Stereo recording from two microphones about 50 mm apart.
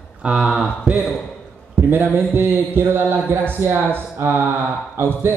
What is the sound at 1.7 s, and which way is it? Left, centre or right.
A man's voice, right.